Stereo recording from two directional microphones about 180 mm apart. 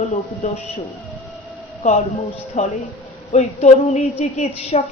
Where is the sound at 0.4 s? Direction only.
35° left (ahead or behind).